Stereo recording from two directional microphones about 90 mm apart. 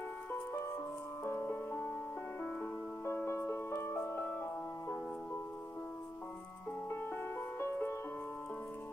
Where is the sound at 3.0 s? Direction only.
30° left (ahead or behind).